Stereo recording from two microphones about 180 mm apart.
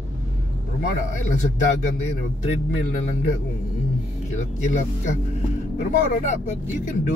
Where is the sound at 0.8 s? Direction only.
40° left (ahead or behind).